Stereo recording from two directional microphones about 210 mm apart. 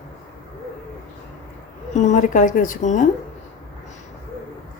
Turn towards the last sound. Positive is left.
turn(degrees=35)  # may be behind; listen again after turning